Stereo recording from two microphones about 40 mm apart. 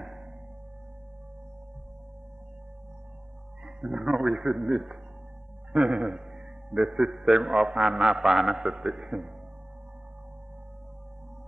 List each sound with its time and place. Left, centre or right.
0.0 s music: centre
3.6 s a man's voice: centre